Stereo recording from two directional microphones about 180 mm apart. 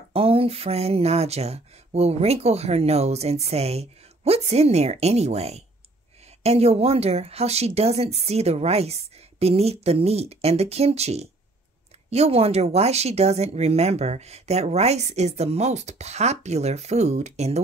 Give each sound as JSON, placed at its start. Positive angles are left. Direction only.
{"t": 0.1, "sound": "speech", "side_deg": -30}